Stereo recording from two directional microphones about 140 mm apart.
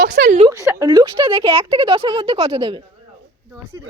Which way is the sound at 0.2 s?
90° right.